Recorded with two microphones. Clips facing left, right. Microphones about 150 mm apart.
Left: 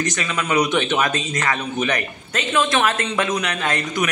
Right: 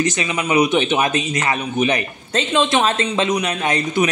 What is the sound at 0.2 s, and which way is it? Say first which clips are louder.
Speech: right 1 dB; 20° right (ahead or behind).